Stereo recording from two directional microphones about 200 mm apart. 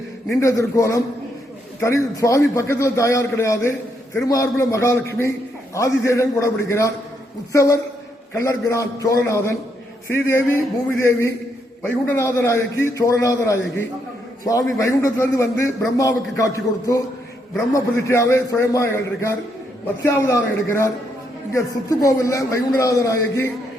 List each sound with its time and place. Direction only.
0.3 s a man's voice: 15° left (ahead or behind)